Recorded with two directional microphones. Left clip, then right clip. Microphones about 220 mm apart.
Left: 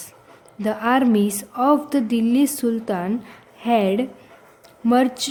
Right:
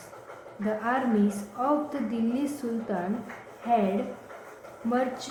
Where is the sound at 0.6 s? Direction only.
50° left (ahead or behind).